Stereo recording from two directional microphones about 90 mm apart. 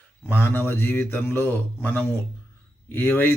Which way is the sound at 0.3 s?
25° left (ahead or behind).